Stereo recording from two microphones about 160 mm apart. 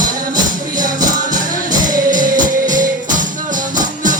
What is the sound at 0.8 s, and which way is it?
Music, 55° right (ahead or behind).